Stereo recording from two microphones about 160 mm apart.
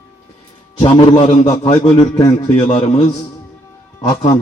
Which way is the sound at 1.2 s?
45° left (ahead or behind).